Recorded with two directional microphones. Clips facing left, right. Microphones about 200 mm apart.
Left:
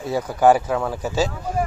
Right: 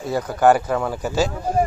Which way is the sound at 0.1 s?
5° left (ahead or behind).